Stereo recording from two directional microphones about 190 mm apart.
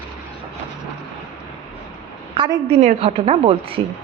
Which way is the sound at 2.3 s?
25° right (ahead or behind).